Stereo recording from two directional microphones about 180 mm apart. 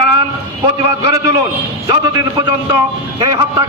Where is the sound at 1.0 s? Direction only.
20° right (ahead or behind).